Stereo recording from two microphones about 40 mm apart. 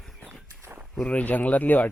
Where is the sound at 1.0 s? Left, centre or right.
Left.